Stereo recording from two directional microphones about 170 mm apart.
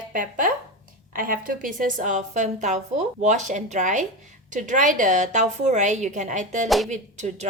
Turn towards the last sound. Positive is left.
turn(degrees=-45)  # may be behind; listen again after turning